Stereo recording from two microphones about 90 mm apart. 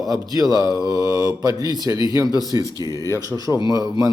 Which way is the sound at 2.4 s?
50° left (ahead or behind).